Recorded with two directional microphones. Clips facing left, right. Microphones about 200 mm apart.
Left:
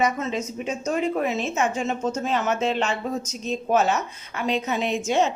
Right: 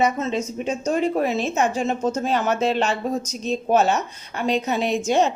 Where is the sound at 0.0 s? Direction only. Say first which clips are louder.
Right 3 dB; 30° right (ahead or behind).